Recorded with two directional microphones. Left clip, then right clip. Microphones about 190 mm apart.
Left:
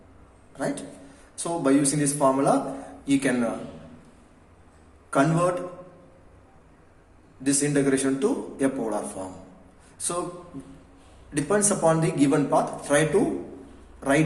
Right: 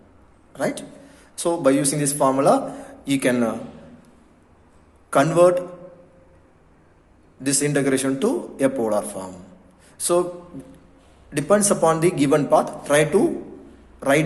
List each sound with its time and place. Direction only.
0.5 s a man's voice: 45° right (ahead or behind)
5.1 s a man's voice: 45° right (ahead or behind)
7.4 s a man's voice: 45° right (ahead or behind)
11.3 s a man's voice: 45° right (ahead or behind)